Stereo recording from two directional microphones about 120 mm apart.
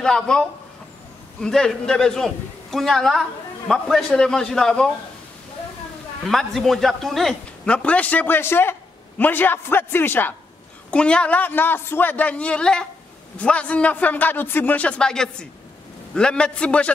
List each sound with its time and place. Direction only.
0.0 s a man's voice: 5° left (ahead or behind)
6.2 s a man's voice: centre (ahead or behind)